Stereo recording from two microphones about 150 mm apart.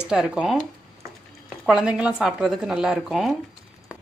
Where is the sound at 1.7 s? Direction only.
5° right (ahead or behind).